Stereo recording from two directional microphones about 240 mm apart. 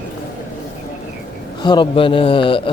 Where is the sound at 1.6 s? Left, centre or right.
Centre.